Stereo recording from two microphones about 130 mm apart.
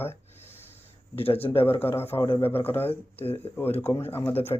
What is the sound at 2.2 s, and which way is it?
Speech, 40° left (ahead or behind).